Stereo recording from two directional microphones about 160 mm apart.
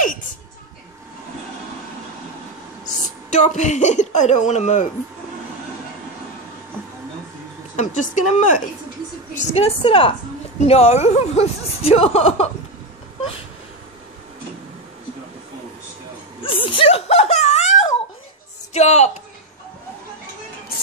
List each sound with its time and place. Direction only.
3.3 s a woman's voice: 45° left (ahead or behind)
7.7 s a woman's voice: 50° left (ahead or behind)
16.4 s a sound: 35° left (ahead or behind)
18.7 s a woman's voice: 45° left (ahead or behind)